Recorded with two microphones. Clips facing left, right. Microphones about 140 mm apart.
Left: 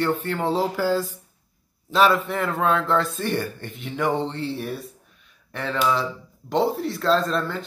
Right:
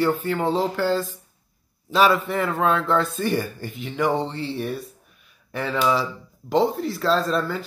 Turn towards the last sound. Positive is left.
turn(degrees=-5)  # may be behind; listen again after turning